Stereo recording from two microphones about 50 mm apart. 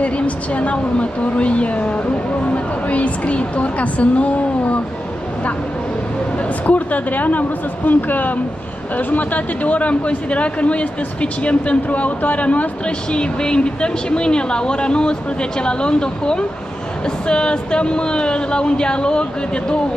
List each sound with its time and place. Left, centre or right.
0.6 s speech: left
6.6 s speech: left